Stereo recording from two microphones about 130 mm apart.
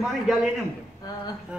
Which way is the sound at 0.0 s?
5° right (ahead or behind).